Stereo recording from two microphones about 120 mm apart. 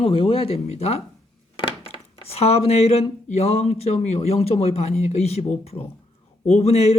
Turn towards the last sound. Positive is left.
turn(degrees=65)  # may be behind; listen again after turning